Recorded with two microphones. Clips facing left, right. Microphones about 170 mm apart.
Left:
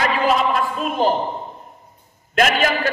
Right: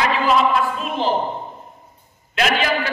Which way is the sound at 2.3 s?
45° left (ahead or behind).